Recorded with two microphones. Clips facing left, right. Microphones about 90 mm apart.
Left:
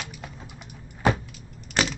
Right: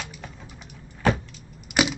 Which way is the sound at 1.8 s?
10° right (ahead or behind).